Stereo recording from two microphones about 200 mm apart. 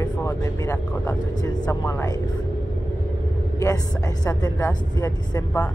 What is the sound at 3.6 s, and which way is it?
A woman's voice, 15° left (ahead or behind).